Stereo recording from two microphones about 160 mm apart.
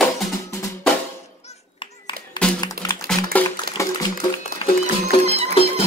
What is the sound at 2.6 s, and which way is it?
Music, 20° left (ahead or behind).